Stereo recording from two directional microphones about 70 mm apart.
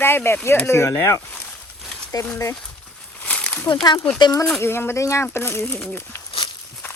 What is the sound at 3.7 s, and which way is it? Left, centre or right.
Speech, left.